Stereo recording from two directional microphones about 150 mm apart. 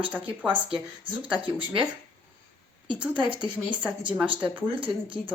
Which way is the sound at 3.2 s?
35° right (ahead or behind).